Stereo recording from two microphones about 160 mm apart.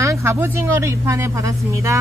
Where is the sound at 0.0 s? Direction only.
15° right (ahead or behind).